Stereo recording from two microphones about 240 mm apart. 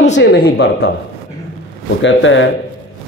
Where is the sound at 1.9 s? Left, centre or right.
Left.